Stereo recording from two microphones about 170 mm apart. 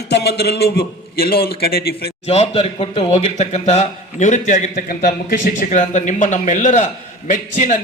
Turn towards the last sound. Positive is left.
turn(degrees=45)  # may be behind; listen again after turning